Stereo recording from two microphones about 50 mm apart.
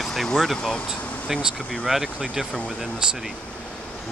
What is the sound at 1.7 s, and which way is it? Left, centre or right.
Speech, centre.